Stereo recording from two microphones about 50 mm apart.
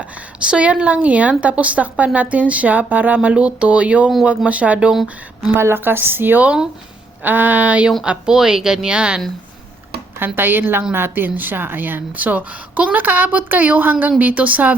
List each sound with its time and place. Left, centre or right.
0.3 s a woman's voice: right
3.2 s a woman's voice: right
5.5 s a woman's voice: right
6.4 s a woman's voice: right
7.2 s a woman's voice: right
8.3 s speech: centre
10.2 s a woman's voice: right